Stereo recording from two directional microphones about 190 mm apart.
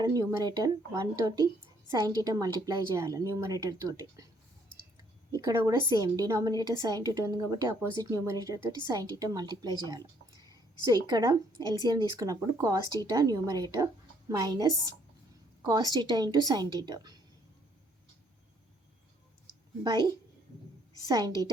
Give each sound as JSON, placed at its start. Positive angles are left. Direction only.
{"t": 0.0, "sound": "speech", "side_deg": -20}
{"t": 5.5, "sound": "speech", "side_deg": -20}
{"t": 19.8, "sound": "speech", "side_deg": -20}
{"t": 21.1, "sound": "speech", "side_deg": -20}